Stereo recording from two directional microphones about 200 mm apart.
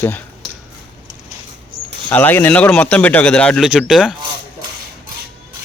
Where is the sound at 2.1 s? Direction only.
10° left (ahead or behind).